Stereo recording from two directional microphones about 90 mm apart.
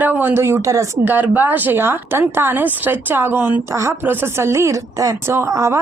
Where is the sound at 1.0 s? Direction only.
20° right (ahead or behind).